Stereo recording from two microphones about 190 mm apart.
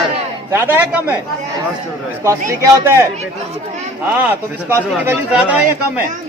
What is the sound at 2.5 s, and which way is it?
Speech, 15° right (ahead or behind).